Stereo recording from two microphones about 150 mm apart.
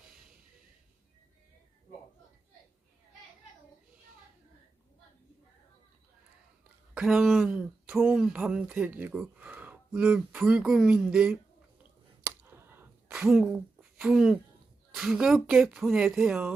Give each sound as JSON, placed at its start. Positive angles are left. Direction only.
{"t": 6.9, "sound": "speech", "side_deg": -5}
{"t": 12.2, "sound": "a sound", "side_deg": -15}
{"t": 13.1, "sound": "speech", "side_deg": -5}